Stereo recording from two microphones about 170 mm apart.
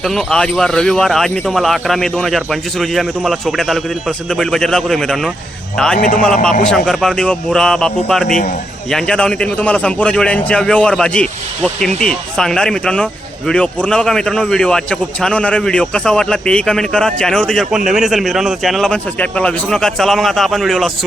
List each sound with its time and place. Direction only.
0.0 s a man's voice: centre (ahead or behind)
6.0 s a man's voice: 50° left (ahead or behind)
6.2 s a man's voice: 5° left (ahead or behind)